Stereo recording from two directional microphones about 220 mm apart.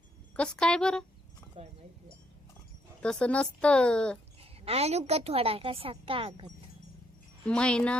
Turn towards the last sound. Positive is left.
turn(degrees=5)  # may be behind; listen again after turning